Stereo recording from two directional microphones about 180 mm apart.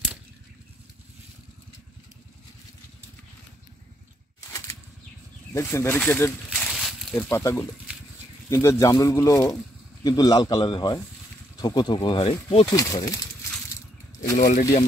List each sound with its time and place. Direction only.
4.4 s bird flight: 15° left (ahead or behind)
5.5 s speech: 15° left (ahead or behind)
6.5 s a sound: centre (ahead or behind)
7.2 s speech: 15° left (ahead or behind); by 12.6 s 30° left (ahead or behind)
12.6 s speech: 20° left (ahead or behind)
14.3 s speech: 50° left (ahead or behind)